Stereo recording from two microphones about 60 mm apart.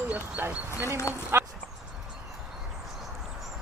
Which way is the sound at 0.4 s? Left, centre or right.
Right.